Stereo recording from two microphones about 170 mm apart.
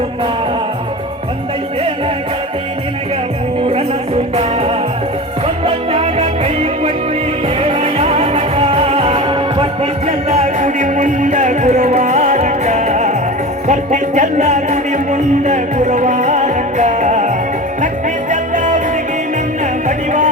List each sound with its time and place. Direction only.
5.6 s music: 35° right (ahead or behind)
10.1 s music: 40° right (ahead or behind)